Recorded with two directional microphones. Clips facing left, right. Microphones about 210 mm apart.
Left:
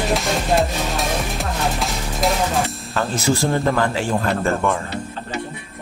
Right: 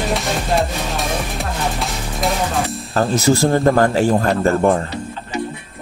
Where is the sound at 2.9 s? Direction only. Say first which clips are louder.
Right 6 dB; 45° right (ahead or behind).